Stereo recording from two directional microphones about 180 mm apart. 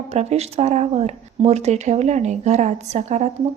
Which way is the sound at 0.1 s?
35° right (ahead or behind).